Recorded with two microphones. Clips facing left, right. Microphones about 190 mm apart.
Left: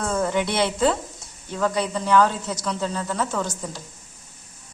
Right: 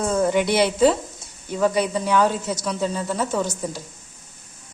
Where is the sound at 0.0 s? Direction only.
15° right (ahead or behind).